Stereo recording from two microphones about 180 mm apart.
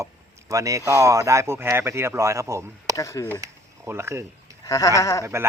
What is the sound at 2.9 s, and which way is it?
Speech, 15° left (ahead or behind).